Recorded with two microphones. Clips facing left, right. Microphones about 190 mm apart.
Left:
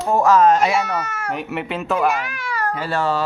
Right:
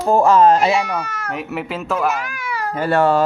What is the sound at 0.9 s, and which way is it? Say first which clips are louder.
Speech: even; 5° left (ahead or behind).